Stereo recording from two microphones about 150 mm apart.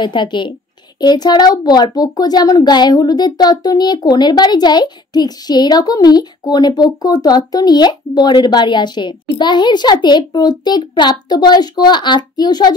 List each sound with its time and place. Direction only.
0.0 s a woman's voice: 30° left (ahead or behind)